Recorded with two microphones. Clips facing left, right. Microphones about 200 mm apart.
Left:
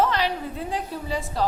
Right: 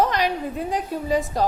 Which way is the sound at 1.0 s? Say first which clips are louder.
Right 5 dB; 45° right (ahead or behind).